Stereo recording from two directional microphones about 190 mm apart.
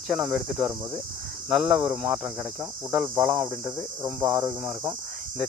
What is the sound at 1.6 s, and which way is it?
Speech, 5° right (ahead or behind).